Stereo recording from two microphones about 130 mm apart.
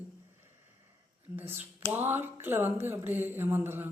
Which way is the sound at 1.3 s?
15° right (ahead or behind).